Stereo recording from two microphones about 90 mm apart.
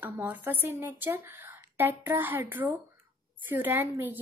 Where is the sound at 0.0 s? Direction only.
20° right (ahead or behind).